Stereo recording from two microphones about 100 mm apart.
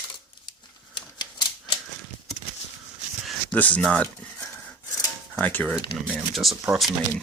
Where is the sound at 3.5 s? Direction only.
15° left (ahead or behind).